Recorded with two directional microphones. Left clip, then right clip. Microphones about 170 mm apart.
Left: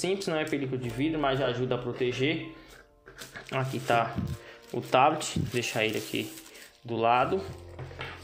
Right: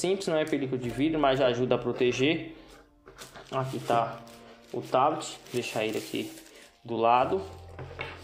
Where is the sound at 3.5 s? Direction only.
20° left (ahead or behind).